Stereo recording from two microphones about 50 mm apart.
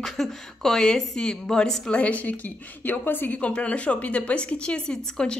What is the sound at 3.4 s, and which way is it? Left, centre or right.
A woman's voice, left.